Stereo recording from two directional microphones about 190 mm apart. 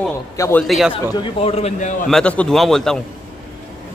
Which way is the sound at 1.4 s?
35° left (ahead or behind).